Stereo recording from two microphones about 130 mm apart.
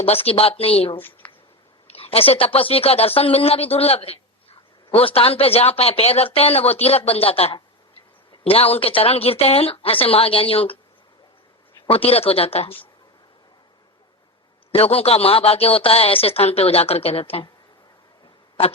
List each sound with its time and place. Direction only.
0.0 s a woman's voice: 50° left (ahead or behind)
0.9 s speech: 15° left (ahead or behind)
1.9 s a woman's voice: 50° left (ahead or behind)
11.9 s a woman's voice: 45° left (ahead or behind)
14.7 s a woman's voice: 50° left (ahead or behind)